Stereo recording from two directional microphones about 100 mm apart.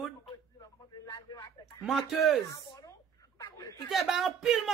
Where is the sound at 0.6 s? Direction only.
45° left (ahead or behind).